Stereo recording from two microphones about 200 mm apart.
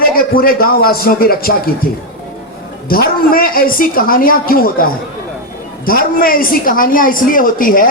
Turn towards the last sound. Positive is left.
turn(degrees=45)  # may be behind; listen again after turning